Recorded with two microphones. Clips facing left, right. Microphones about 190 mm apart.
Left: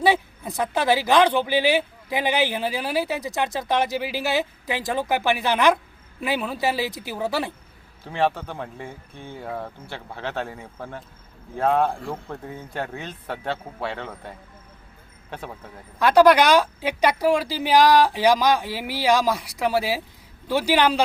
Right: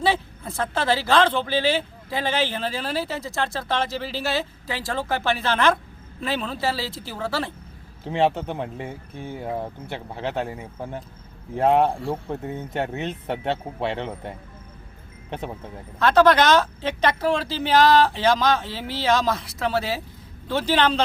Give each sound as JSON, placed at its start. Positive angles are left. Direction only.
{"t": 0.0, "sound": "speech", "side_deg": 15}
{"t": 8.0, "sound": "speech", "side_deg": -25}
{"t": 16.0, "sound": "speech", "side_deg": 15}